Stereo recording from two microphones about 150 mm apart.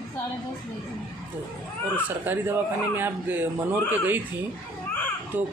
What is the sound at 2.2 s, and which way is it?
Speech, 15° right (ahead or behind).